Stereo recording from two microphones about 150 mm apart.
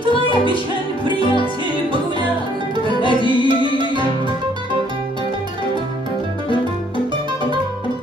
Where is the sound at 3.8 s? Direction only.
30° right (ahead or behind).